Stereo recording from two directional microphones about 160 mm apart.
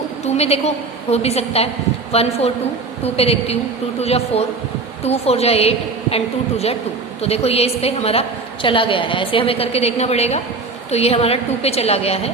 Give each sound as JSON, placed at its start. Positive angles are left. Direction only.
{"t": 0.3, "sound": "a woman's voice", "side_deg": 40}